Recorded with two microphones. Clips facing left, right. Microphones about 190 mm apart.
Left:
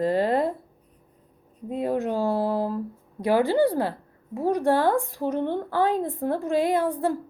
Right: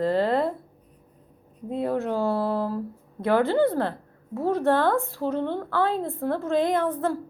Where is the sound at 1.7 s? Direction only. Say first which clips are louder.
Even; 15° left (ahead or behind).